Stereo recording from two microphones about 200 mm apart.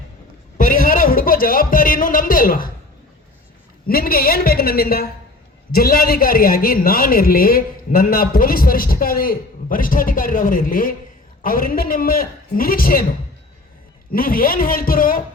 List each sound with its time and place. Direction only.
0.6 s a sound: 45° left (ahead or behind)
3.8 s a man's voice: 45° left (ahead or behind)
14.1 s a man's voice: 45° left (ahead or behind)